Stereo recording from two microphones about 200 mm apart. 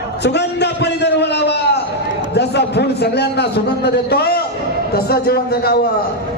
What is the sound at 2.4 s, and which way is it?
A man's voice, 55° left (ahead or behind).